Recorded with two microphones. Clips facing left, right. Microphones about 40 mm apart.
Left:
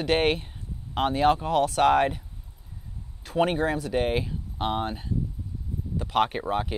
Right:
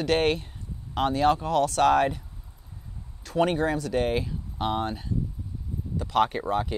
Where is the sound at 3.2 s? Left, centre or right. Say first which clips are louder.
Even; centre.